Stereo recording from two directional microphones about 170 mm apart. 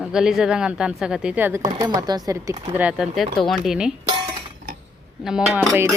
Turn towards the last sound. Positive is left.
turn(degrees=-5)  # may be behind; listen again after turning